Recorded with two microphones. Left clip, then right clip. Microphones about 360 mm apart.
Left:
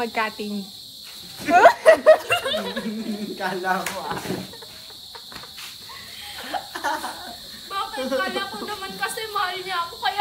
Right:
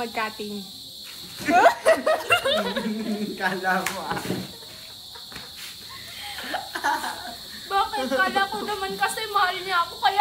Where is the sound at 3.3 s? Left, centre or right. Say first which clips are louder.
Even; centre.